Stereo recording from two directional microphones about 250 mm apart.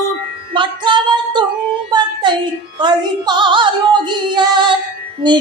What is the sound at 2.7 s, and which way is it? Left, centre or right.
Female singing, centre.